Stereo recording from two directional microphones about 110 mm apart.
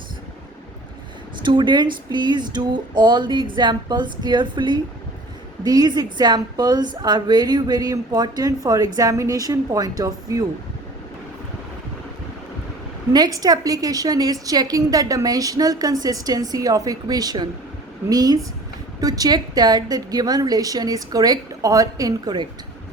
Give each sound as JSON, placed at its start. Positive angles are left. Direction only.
{"t": 1.4, "sound": "a woman's voice", "side_deg": -45}
{"t": 13.1, "sound": "a woman's voice", "side_deg": -35}